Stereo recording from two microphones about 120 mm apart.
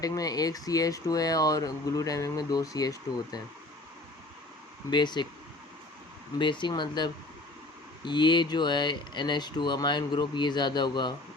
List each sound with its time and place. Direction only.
0.0 s speech: 30° left (ahead or behind)
4.9 s speech: 40° left (ahead or behind)
6.4 s speech: 40° left (ahead or behind)